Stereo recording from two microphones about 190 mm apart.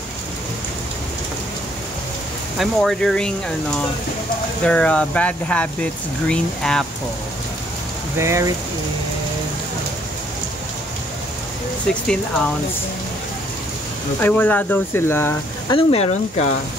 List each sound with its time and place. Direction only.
2.6 s speech: centre (ahead or behind)
4.6 s speech: 5° left (ahead or behind)
8.2 s speech: 15° right (ahead or behind)
14.2 s speech: 10° left (ahead or behind)
15.7 s speech: 30° left (ahead or behind)